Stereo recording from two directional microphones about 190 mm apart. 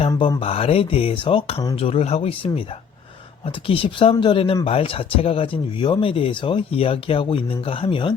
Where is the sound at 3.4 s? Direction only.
30° left (ahead or behind).